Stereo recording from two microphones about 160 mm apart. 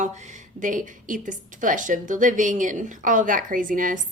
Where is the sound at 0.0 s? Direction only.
50° right (ahead or behind).